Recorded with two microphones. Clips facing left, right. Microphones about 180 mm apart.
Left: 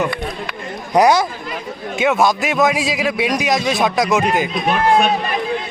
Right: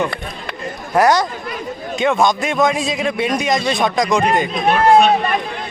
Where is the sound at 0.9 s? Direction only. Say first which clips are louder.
Left 1 dB; 10° left (ahead or behind).